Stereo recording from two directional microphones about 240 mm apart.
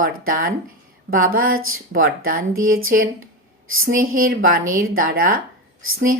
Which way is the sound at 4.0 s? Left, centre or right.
Right.